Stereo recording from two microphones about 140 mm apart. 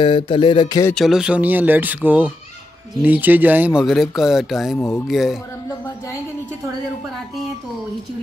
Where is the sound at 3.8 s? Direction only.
Centre (ahead or behind).